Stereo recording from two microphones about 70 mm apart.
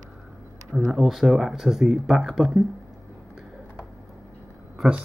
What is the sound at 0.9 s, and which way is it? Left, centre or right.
Speech, centre.